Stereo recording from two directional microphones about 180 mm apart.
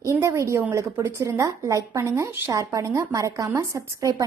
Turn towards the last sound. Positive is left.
turn(degrees=-20)  # may be behind; listen again after turning